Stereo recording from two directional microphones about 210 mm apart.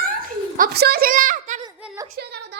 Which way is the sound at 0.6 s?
50° right (ahead or behind).